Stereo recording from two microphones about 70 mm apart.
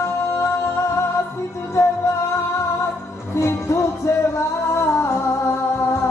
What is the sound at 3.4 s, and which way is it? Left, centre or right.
Music, left.